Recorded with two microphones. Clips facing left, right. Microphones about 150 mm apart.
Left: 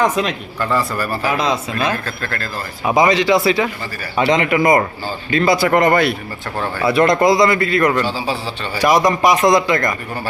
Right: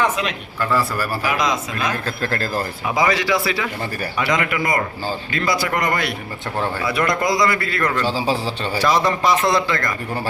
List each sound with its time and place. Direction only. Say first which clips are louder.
0.0 s a man's voice: left 4 dB; 35° left (ahead or behind)
0.6 s a man's voice: left 1 dB; 5° right (ahead or behind)
1.3 s a man's voice: left 3 dB; 30° left (ahead or behind)
2.0 s speech: right 2 dB; 30° right (ahead or behind)
2.8 s speech: left 7 dB; 20° left (ahead or behind)
5.7 s speech: left 8 dB; 55° left (ahead or behind)
6.8 s speech: left 9 dB; 25° left (ahead or behind)
8.0 s speech: right 1 dB; 35° right (ahead or behind)
8.8 s a man's voice: left 5 dB; 15° left (ahead or behind)